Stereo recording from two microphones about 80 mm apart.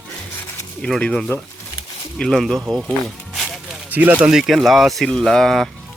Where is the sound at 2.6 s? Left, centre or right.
Right.